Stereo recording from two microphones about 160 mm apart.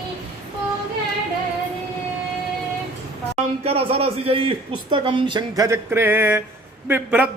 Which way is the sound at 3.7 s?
40° right (ahead or behind).